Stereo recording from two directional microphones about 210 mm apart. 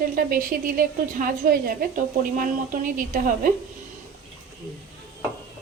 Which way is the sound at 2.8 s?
40° right (ahead or behind).